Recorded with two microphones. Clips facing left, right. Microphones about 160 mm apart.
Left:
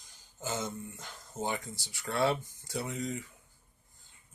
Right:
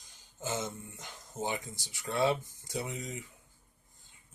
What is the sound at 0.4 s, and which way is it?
A man's voice, 20° right (ahead or behind).